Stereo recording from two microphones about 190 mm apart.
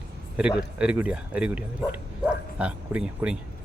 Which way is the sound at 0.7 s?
5° right (ahead or behind).